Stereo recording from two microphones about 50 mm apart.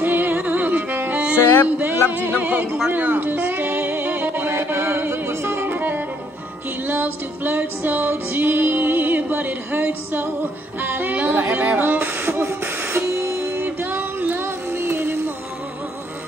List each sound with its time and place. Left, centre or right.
0.0 s music: right
1.4 s music: left
1.8 s music: right
4.5 s music: right
5.7 s music: right
11.1 s beatboxing: right
13.8 s music: right
14.4 s music: right